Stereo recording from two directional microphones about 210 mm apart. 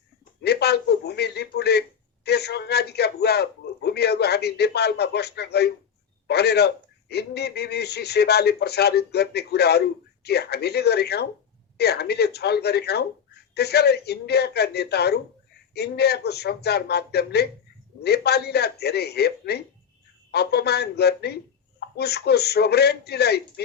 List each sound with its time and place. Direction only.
0.4 s a man's voice: 50° left (ahead or behind)